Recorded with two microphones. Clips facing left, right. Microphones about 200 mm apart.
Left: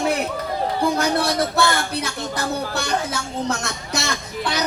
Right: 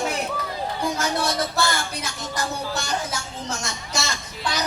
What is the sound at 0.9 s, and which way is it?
A man's voice, 60° left (ahead or behind).